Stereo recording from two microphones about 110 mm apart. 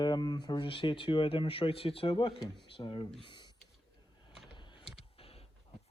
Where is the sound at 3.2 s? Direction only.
45° left (ahead or behind).